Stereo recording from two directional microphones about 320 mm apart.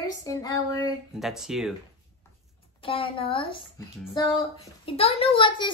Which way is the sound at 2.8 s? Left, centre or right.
Centre.